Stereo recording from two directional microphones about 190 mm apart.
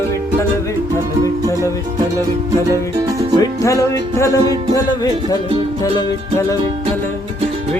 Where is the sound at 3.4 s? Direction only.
15° left (ahead or behind).